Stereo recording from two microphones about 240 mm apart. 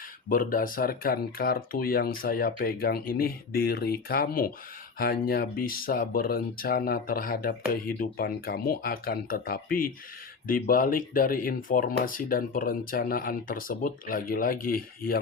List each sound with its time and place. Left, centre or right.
0.3 s speech: left